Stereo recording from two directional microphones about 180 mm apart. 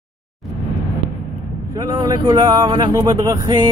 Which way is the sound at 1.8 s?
20° right (ahead or behind).